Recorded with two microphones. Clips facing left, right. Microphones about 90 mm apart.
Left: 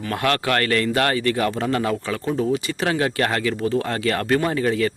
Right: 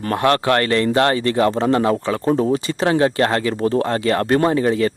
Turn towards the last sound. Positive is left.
turn(degrees=-30)  # may be behind; listen again after turning